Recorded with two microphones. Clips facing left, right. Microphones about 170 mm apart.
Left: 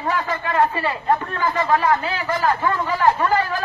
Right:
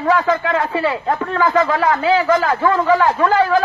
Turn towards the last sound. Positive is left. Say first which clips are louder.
# right 6 dB
turn(degrees=-90)